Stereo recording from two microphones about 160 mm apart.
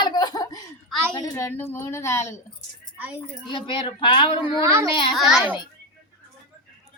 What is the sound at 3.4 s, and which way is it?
Speech, 30° left (ahead or behind).